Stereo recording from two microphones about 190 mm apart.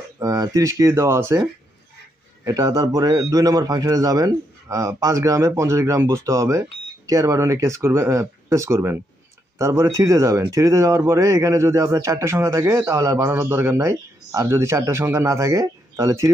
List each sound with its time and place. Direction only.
0.2 s speech: 20° right (ahead or behind)
2.4 s speech: 20° right (ahead or behind)